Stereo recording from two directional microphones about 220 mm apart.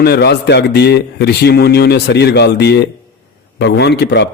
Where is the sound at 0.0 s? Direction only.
50° left (ahead or behind).